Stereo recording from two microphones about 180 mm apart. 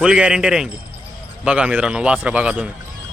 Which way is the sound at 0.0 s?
5° right (ahead or behind).